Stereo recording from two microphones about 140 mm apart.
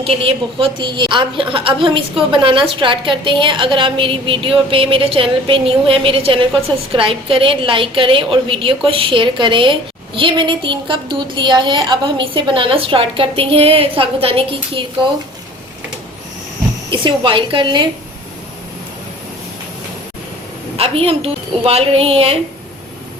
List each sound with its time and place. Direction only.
0.0 s a woman's voice: 40° right (ahead or behind)
16.9 s a woman's voice: 35° right (ahead or behind)
20.7 s a woman's voice: 40° right (ahead or behind)